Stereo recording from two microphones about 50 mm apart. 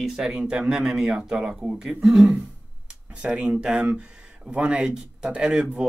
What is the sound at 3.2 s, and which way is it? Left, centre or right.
Speech, right.